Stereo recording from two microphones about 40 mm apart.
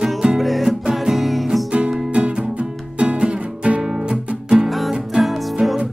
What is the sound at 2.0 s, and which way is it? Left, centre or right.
Music, right.